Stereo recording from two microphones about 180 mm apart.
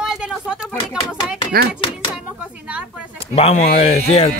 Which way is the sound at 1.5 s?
55° right (ahead or behind).